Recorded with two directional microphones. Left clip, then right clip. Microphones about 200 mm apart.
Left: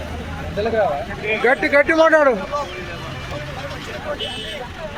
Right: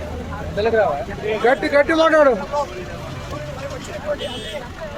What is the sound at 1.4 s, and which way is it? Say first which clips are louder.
Speech: even; 25° left (ahead or behind).